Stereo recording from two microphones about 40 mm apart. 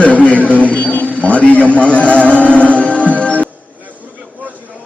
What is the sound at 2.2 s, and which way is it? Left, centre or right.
Music, left.